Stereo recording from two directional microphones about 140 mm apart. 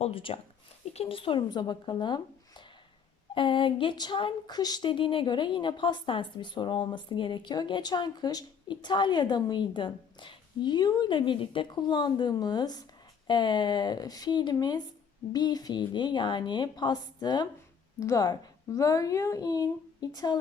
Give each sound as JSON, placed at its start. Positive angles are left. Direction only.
{"t": 0.0, "sound": "a woman's voice", "side_deg": 40}
{"t": 3.3, "sound": "a woman's voice", "side_deg": 35}